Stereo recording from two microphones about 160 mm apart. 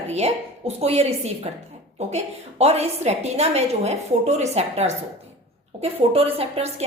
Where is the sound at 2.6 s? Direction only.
40° right (ahead or behind).